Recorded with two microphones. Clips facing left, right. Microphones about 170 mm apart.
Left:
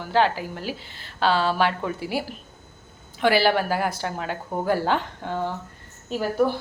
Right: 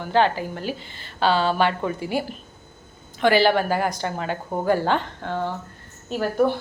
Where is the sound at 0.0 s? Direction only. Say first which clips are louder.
Right 1 dB; 5° left (ahead or behind).